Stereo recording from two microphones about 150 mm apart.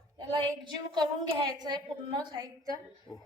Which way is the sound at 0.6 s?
30° right (ahead or behind).